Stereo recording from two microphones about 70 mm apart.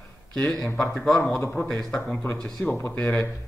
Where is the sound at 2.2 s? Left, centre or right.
Left.